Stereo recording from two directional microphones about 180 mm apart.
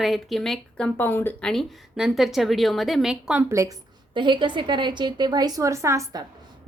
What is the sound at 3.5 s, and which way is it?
A woman's voice, 20° right (ahead or behind).